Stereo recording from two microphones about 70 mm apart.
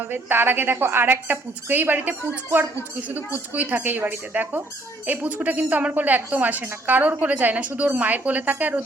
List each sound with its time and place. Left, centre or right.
0.0 s speech: right